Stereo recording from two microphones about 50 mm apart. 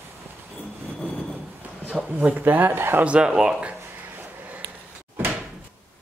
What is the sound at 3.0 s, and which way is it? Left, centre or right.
Speech, centre.